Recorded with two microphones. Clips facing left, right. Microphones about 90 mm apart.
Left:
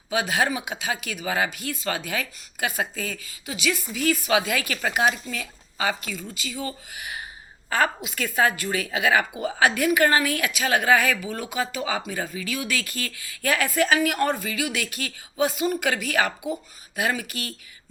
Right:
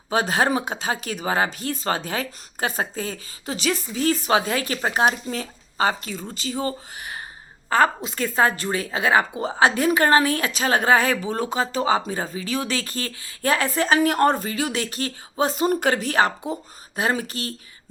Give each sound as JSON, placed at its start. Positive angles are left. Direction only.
{"t": 0.1, "sound": "a woman's voice", "side_deg": -40}